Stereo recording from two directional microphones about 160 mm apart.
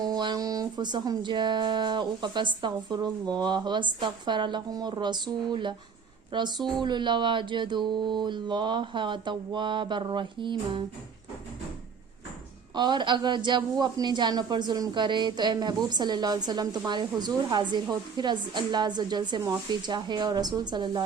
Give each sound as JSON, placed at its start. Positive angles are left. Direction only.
{"t": 0.0, "sound": "speech", "side_deg": -25}
{"t": 6.6, "sound": "speech", "side_deg": 0}
{"t": 6.8, "sound": "speech", "side_deg": -30}
{"t": 12.7, "sound": "speech", "side_deg": -30}